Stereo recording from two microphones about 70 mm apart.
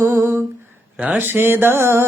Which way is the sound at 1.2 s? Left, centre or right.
Right.